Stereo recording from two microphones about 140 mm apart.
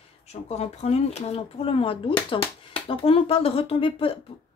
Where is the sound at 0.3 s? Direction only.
50° left (ahead or behind).